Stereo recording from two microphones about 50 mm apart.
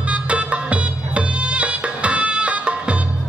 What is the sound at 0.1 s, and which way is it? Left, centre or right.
Music, right.